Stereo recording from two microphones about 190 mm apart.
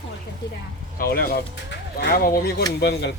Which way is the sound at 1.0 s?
50° left (ahead or behind).